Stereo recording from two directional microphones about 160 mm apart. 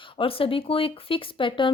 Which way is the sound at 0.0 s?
35° left (ahead or behind).